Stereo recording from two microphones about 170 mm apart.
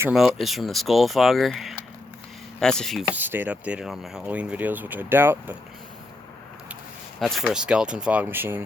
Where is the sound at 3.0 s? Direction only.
10° right (ahead or behind).